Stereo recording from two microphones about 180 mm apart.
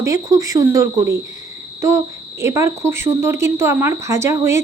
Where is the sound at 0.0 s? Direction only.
20° right (ahead or behind).